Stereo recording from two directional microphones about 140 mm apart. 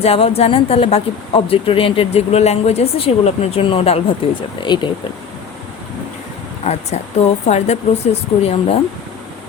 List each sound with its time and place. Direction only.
0.0 s a woman's voice: 45° left (ahead or behind)
6.7 s a woman's voice: 50° left (ahead or behind)